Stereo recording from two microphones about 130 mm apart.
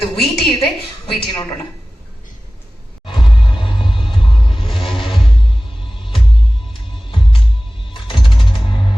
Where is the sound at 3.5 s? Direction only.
40° left (ahead or behind).